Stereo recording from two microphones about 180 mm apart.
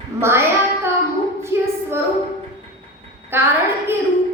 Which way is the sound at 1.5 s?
15° right (ahead or behind).